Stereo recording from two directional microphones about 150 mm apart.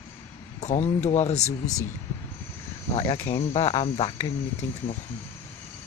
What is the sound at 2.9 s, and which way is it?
Speech, 40° left (ahead or behind).